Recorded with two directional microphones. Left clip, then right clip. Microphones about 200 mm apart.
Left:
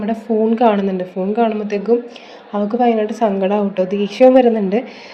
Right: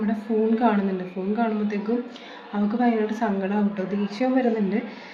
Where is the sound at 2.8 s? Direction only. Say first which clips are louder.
Left 9 dB; 35° left (ahead or behind).